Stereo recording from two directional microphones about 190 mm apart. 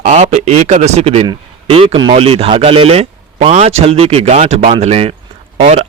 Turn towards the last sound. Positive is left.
turn(degrees=-30)  # may be behind; listen again after turning